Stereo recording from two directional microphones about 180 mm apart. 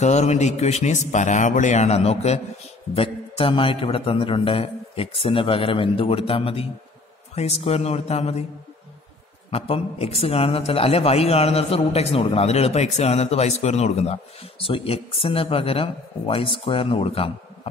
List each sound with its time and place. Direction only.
0.0 s a man's voice: 40° left (ahead or behind)
9.5 s a man's voice: 30° left (ahead or behind)